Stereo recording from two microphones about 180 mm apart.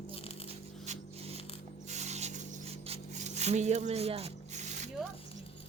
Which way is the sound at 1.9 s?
40° right (ahead or behind).